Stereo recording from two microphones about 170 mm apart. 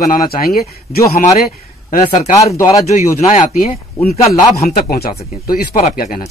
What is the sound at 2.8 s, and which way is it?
Speech, 40° left (ahead or behind).